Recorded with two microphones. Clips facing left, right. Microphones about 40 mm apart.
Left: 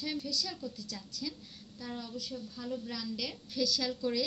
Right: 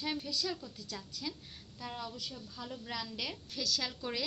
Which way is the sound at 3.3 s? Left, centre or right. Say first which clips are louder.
Left 4 dB; centre.